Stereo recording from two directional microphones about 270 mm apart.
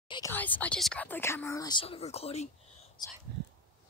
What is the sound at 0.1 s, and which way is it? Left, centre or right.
Speech, centre.